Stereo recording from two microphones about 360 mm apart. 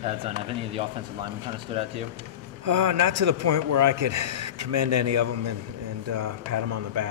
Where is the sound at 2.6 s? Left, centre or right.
Right.